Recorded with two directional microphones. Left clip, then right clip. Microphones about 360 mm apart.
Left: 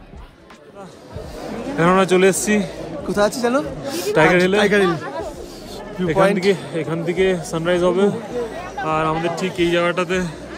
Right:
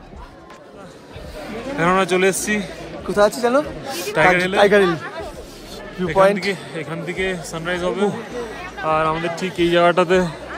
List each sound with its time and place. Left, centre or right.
1.8 s a man's voice: centre
4.6 s a man's voice: centre
5.9 s a man's voice: centre
6.5 s a man's voice: centre
8.8 s a man's voice: centre